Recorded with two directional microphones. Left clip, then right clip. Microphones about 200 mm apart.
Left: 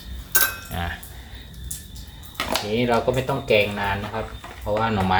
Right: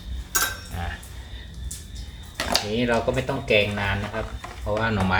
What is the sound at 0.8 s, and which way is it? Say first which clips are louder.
Cutlery: left 7 dB; 45° left (ahead or behind).